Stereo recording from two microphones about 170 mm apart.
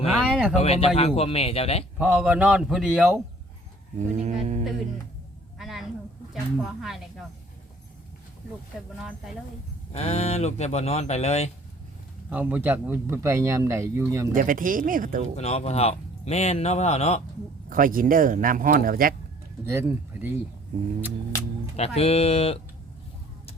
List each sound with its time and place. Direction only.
0.3 s speech: 5° right (ahead or behind)
0.6 s speech: 35° left (ahead or behind)
2.0 s speech: 10° right (ahead or behind)
3.9 s speech: 45° right (ahead or behind)
5.5 s a sound: centre (ahead or behind)
6.6 s speech: centre (ahead or behind)
9.9 s speech: 40° left (ahead or behind)
12.3 s speech: 10° right (ahead or behind)
14.3 s speech: 50° right (ahead or behind)
15.4 s speech: 40° left (ahead or behind)
17.7 s speech: 55° right (ahead or behind)
19.7 s speech: 10° right (ahead or behind)
21.8 s speech: 35° left (ahead or behind)